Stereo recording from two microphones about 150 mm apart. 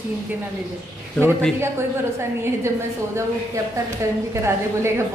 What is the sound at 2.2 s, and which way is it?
A woman's voice, 20° right (ahead or behind).